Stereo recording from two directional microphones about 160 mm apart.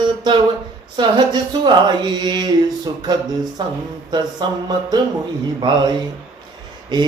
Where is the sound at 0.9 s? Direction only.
30° right (ahead or behind).